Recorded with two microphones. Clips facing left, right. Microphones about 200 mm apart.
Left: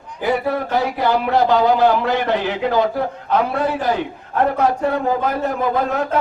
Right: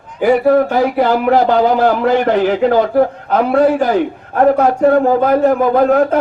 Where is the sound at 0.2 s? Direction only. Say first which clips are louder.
Right 9 dB; 50° right (ahead or behind).